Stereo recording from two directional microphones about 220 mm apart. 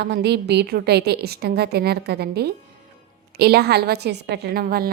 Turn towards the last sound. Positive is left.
turn(degrees=-45)  # may be behind; listen again after turning